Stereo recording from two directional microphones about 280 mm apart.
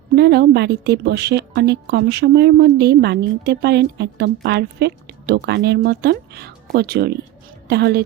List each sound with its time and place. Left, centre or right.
0.2 s a woman's voice: right